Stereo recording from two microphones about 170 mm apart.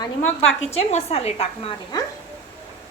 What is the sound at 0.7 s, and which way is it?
A woman's voice, 40° left (ahead or behind).